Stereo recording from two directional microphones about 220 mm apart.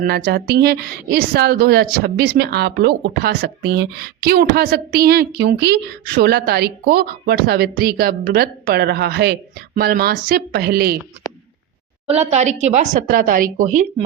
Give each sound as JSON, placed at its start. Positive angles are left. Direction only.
{"t": 0.3, "sound": "a woman's voice", "side_deg": -45}
{"t": 12.0, "sound": "speech", "side_deg": -30}